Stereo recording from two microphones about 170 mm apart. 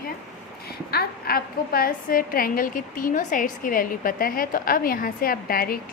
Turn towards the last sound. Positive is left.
turn(degrees=60)  # may be behind; listen again after turning